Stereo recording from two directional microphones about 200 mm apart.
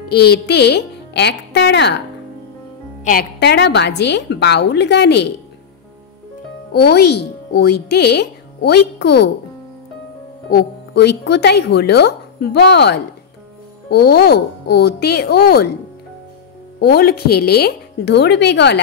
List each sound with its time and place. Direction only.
0.1 s speech: 55° left (ahead or behind)
3.0 s speech: 45° left (ahead or behind)
6.7 s speech: 55° left (ahead or behind)
10.5 s speech: 55° left (ahead or behind)
16.8 s speech: 50° left (ahead or behind)